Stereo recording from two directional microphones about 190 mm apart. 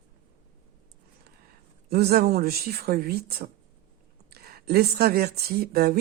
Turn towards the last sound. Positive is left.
turn(degrees=-55)  # may be behind; listen again after turning